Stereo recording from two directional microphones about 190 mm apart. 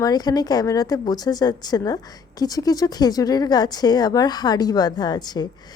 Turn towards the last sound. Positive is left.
turn(degrees=20)  # may be behind; listen again after turning